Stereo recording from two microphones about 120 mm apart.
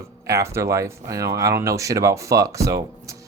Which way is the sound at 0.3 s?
25° right (ahead or behind).